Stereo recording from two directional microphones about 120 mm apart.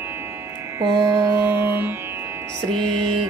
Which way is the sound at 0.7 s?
30° right (ahead or behind).